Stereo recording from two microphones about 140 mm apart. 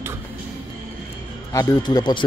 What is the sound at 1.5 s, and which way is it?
Speech, 25° left (ahead or behind).